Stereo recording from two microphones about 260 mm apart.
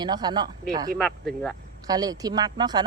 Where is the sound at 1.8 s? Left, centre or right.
Centre.